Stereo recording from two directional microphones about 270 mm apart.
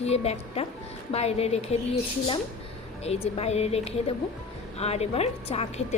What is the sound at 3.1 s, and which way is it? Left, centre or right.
A woman's voice, left.